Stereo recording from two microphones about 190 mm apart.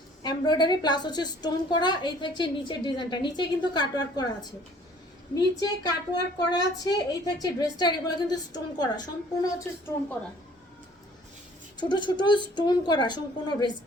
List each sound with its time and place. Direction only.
0.2 s a woman's voice: 20° left (ahead or behind)
5.3 s a woman's voice: 20° left (ahead or behind)
11.8 s a woman's voice: 25° left (ahead or behind)